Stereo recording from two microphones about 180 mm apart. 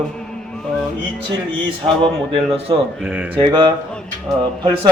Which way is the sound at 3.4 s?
25° right (ahead or behind).